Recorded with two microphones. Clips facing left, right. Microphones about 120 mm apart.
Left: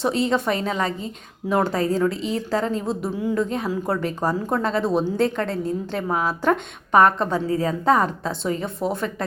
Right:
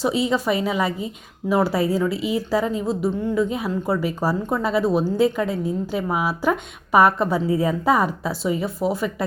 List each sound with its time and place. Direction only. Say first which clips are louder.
0.0 s a woman's voice: even; 5° right (ahead or behind)